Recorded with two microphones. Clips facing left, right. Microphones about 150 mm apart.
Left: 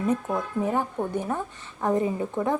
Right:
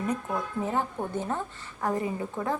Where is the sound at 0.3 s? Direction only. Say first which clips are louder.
Left 4 dB; 10° left (ahead or behind).